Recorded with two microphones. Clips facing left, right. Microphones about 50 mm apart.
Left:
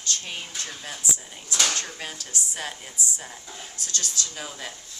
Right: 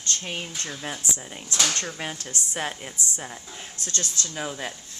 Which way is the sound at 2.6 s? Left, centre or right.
Right.